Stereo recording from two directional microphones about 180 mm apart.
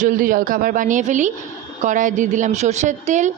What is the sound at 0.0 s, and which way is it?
A woman's voice, 50° right (ahead or behind).